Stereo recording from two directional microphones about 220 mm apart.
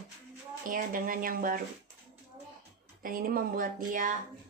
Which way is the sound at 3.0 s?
40° right (ahead or behind).